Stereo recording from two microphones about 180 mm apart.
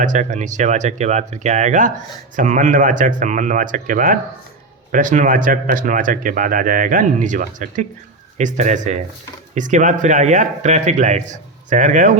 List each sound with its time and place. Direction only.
0.0 s speech: 45° right (ahead or behind)